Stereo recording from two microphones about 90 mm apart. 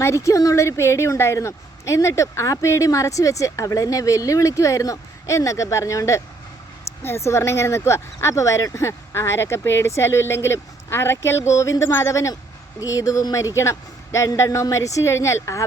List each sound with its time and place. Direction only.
0.0 s a woman's voice: 35° left (ahead or behind)